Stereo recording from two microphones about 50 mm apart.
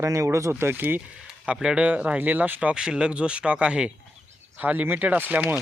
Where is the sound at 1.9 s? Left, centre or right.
Right.